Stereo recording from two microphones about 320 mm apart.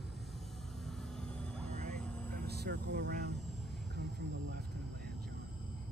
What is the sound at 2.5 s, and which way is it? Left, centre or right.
Vehicle, right.